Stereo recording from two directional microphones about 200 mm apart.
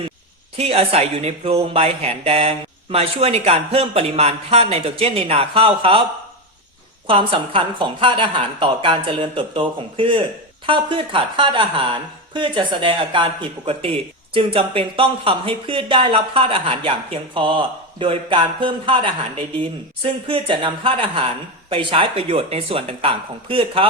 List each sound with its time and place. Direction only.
0.5 s speech: 30° right (ahead or behind)
7.1 s speech: 25° right (ahead or behind)